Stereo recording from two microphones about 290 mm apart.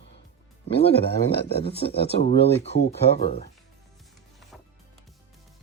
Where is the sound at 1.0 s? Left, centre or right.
Left.